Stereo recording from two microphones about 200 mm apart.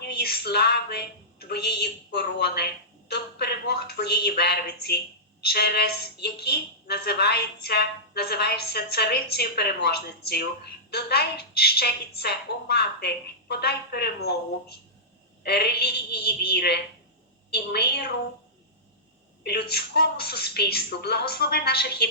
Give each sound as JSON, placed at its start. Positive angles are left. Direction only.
{"t": 0.0, "sound": "a woman's voice", "side_deg": 50}
{"t": 15.4, "sound": "a woman's voice", "side_deg": 55}
{"t": 19.4, "sound": "a woman's voice", "side_deg": 55}